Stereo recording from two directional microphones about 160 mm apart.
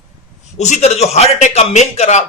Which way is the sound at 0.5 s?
45° left (ahead or behind).